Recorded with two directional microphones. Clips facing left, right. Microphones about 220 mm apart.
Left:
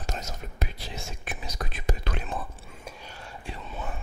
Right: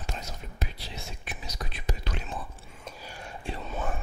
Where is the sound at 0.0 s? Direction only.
45° left (ahead or behind).